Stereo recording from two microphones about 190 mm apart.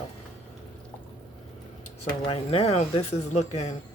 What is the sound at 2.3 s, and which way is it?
Speech, 30° left (ahead or behind).